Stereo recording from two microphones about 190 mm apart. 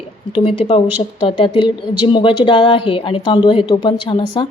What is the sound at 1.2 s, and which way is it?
A woman's voice, 25° left (ahead or behind).